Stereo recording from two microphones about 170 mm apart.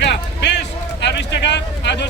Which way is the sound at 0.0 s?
90° left.